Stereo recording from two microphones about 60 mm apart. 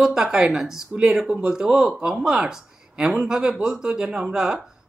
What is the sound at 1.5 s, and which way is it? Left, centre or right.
Speech, centre.